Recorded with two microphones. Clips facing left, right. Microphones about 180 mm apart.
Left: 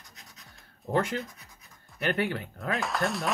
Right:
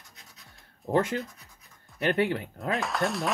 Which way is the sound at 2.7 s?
Centre (ahead or behind).